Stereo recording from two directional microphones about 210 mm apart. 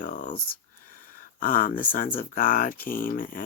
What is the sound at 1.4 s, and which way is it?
Speech, 40° left (ahead or behind).